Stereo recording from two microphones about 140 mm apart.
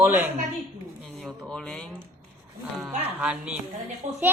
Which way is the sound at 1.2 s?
5° left (ahead or behind).